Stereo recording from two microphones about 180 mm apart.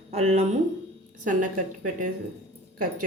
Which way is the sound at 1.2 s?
45° right (ahead or behind).